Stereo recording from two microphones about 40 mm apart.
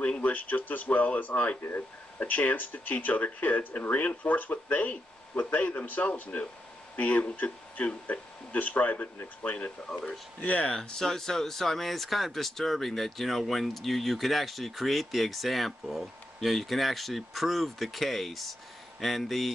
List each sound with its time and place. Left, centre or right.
0.0 s speech: left
10.7 s speech: centre